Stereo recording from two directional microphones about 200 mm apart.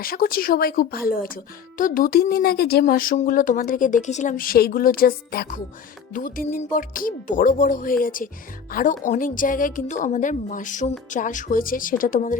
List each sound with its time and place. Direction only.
0.0 s a woman's voice: 45° left (ahead or behind)